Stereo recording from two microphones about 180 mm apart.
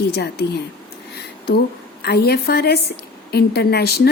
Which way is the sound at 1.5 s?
60° left (ahead or behind).